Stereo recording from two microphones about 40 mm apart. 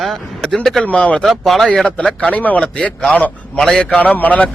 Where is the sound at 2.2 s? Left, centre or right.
Left.